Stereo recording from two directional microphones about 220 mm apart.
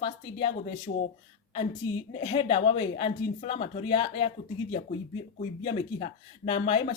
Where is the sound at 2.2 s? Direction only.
25° left (ahead or behind).